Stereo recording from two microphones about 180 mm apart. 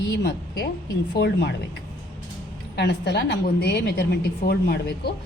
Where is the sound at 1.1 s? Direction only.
70° left (ahead or behind).